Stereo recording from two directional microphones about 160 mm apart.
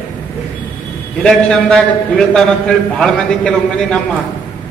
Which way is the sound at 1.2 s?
5° left (ahead or behind).